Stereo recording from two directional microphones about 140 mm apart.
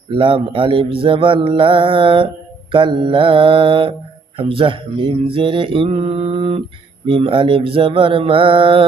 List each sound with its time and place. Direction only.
0.1 s speech: 40° right (ahead or behind)